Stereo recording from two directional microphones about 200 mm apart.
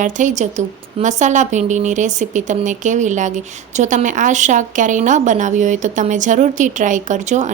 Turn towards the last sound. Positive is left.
turn(degrees=-35)  # may be behind; listen again after turning